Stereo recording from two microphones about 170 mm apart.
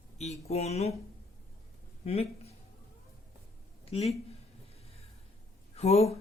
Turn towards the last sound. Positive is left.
turn(degrees=35)  # may be behind; listen again after turning